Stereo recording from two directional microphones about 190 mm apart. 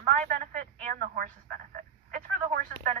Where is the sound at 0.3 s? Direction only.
45° right (ahead or behind).